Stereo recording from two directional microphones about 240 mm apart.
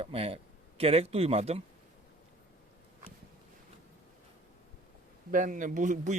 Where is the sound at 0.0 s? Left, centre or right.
Right.